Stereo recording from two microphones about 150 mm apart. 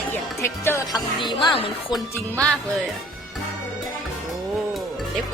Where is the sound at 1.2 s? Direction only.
30° left (ahead or behind).